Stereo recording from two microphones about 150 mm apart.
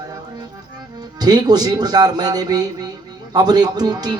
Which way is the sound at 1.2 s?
25° right (ahead or behind).